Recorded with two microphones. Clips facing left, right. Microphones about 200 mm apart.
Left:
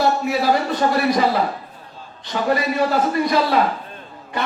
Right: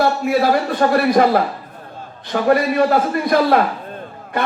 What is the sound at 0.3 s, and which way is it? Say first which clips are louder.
A man's voice: right 3 dB; 55° right (ahead or behind).